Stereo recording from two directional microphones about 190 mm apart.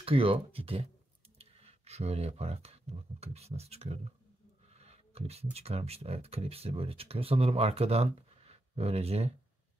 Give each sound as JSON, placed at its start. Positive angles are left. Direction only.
{"t": 0.0, "sound": "speech", "side_deg": -30}